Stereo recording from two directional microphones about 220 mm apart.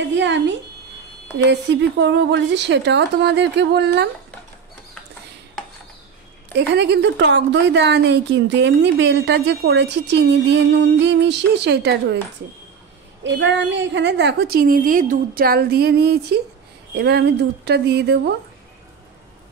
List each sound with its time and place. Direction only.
0.1 s a sound: 55° right (ahead or behind)
1.5 s a woman's voice: 55° right (ahead or behind)
6.5 s a woman's voice: 50° right (ahead or behind)
13.2 s a woman's voice: 55° right (ahead or behind)